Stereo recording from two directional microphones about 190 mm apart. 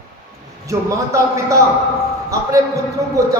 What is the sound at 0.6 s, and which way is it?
Speech, 15° right (ahead or behind).